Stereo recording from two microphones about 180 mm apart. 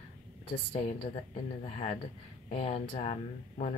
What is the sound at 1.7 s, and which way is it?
Speech, 35° left (ahead or behind).